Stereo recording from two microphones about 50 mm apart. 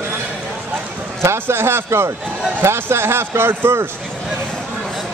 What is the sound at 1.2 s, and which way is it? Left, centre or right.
A man's voice, right.